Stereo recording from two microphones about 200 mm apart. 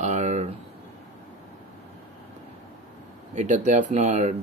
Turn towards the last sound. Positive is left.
turn(degrees=-35)  # may be behind; listen again after turning